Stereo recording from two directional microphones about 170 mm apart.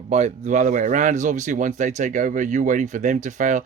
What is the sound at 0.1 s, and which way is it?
Speech, 40° right (ahead or behind).